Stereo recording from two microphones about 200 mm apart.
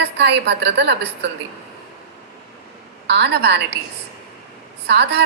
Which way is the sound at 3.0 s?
60° right (ahead or behind).